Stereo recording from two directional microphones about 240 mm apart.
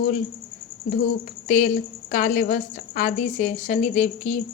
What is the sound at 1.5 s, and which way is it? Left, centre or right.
A woman's voice, left.